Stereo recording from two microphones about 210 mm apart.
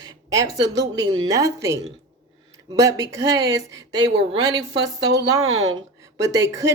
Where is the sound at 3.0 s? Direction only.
15° right (ahead or behind).